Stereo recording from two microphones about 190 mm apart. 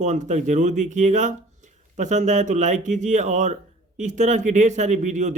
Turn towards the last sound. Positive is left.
turn(degrees=-40)  # may be behind; listen again after turning